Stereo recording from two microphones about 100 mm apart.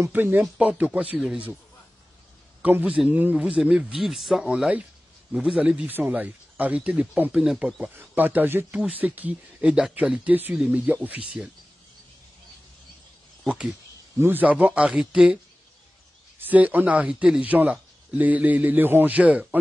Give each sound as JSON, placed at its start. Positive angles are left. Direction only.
{"t": 0.0, "sound": "a man's voice", "side_deg": -20}
{"t": 2.6, "sound": "a man's voice", "side_deg": -15}
{"t": 8.1, "sound": "a man's voice", "side_deg": -20}
{"t": 14.1, "sound": "a man's voice", "side_deg": -20}
{"t": 16.3, "sound": "a man's voice", "side_deg": -15}